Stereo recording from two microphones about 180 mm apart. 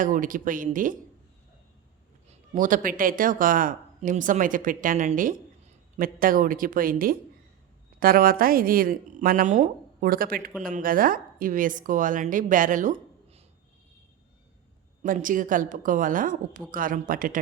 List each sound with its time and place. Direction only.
0.0 s a woman's voice: 45° right (ahead or behind)
2.5 s a woman's voice: 45° right (ahead or behind)
15.0 s a woman's voice: 50° right (ahead or behind)